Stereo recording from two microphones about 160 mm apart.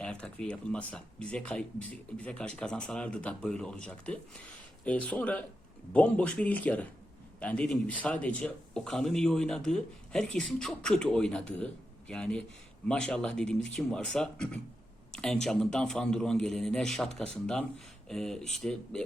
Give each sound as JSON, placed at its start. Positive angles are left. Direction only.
{"t": 0.0, "sound": "speech", "side_deg": 5}